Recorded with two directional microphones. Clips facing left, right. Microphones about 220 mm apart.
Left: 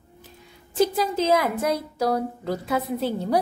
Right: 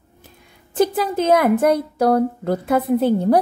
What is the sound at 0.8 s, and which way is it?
A woman's voice, 55° right (ahead or behind).